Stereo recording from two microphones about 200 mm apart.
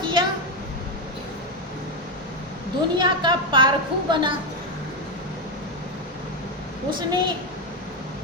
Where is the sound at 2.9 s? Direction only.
25° right (ahead or behind).